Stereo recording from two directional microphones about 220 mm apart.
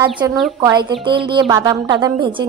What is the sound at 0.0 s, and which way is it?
A woman's voice, 20° right (ahead or behind).